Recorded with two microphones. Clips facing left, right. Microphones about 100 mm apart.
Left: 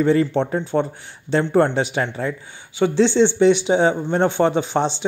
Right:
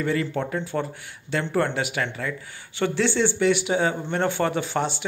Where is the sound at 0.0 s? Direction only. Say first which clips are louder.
Left 8 dB; 30° left (ahead or behind).